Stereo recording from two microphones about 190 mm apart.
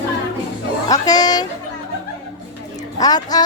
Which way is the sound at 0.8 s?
20° left (ahead or behind).